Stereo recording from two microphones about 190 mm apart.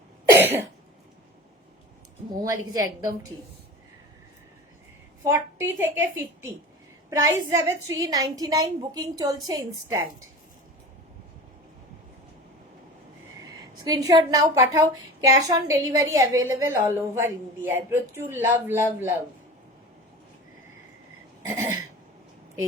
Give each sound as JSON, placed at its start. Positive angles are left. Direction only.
{"t": 0.3, "sound": "cough", "side_deg": -10}
{"t": 2.4, "sound": "a woman's voice", "side_deg": -20}
{"t": 5.2, "sound": "a woman's voice", "side_deg": -15}
{"t": 13.8, "sound": "a woman's voice", "side_deg": -20}
{"t": 21.4, "sound": "a sound", "side_deg": -15}